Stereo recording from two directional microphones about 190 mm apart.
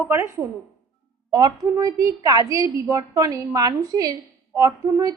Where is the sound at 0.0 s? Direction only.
15° right (ahead or behind).